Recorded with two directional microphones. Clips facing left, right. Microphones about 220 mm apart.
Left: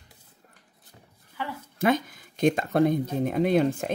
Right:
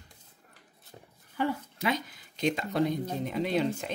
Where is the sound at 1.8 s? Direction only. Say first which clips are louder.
Left 10 dB; 50° left (ahead or behind).